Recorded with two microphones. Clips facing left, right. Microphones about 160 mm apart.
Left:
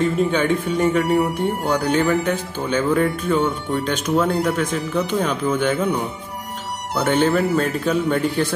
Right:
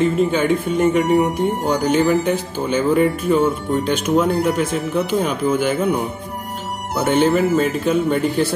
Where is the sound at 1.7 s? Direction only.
15° right (ahead or behind).